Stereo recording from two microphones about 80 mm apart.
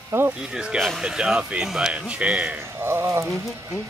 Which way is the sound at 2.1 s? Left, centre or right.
Centre.